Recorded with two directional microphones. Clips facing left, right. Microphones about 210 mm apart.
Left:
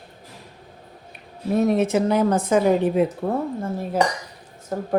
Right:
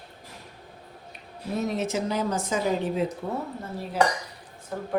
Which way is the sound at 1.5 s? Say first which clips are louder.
Left 8 dB; 55° left (ahead or behind).